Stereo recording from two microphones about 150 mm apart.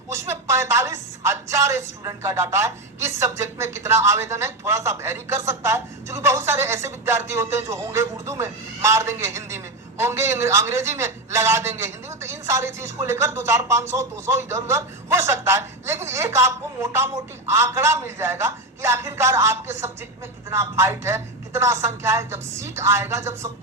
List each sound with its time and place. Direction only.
0.1 s a man's voice: 20° right (ahead or behind)